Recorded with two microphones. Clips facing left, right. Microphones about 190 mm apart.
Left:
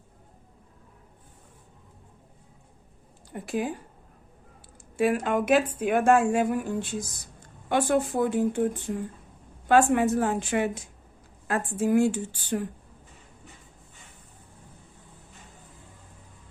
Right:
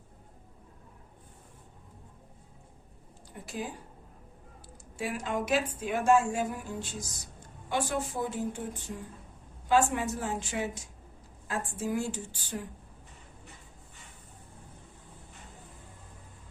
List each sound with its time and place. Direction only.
3.3 s speech: 65° left (ahead or behind)
4.9 s speech: 60° left (ahead or behind)